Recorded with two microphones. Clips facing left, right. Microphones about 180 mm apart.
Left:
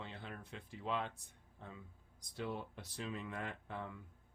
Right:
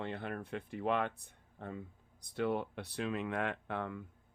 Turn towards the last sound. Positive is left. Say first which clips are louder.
# right 7 dB
turn(degrees=-70)  # may be behind; listen again after turning